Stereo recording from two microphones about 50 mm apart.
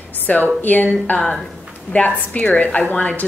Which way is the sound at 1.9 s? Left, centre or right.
Left.